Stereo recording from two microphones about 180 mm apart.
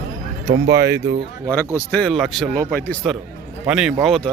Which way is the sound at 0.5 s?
75° right (ahead or behind).